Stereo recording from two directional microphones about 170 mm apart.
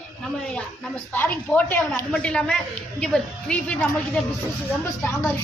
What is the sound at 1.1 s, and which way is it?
A woman's voice, 10° left (ahead or behind).